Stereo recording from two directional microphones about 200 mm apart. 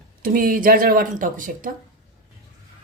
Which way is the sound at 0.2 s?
45° right (ahead or behind).